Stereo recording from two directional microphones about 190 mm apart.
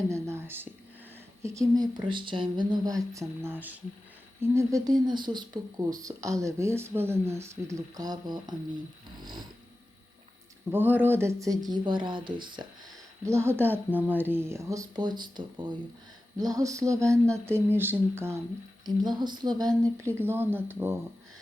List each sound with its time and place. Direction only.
0.1 s whispering: 15° right (ahead or behind)
1.4 s speech: 15° right (ahead or behind)
9.1 s a sound: 25° right (ahead or behind)
10.7 s speech: 10° right (ahead or behind)
13.2 s speech: 15° right (ahead or behind)